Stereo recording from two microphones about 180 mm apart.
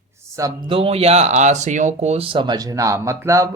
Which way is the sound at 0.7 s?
30° right (ahead or behind).